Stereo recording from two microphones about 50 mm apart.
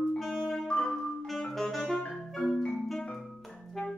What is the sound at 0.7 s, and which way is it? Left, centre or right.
Music, centre.